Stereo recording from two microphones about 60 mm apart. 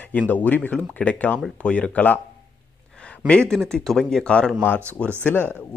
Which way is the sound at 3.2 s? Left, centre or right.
Centre.